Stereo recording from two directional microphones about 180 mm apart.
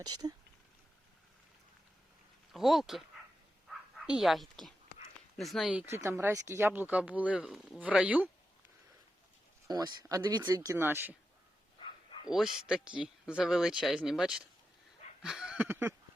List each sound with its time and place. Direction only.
0.0 s speech: 20° right (ahead or behind)
2.5 s speech: centre (ahead or behind)
3.7 s a sound: 5° right (ahead or behind)
5.4 s speech: centre (ahead or behind)
9.6 s speech: 20° right (ahead or behind)
12.3 s speech: centre (ahead or behind)
15.2 s a sound: 5° right (ahead or behind)